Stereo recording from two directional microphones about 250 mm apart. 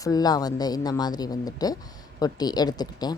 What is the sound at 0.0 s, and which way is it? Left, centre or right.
A woman's voice, centre.